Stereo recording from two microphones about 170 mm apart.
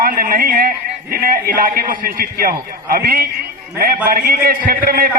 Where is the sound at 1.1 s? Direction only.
60° right (ahead or behind).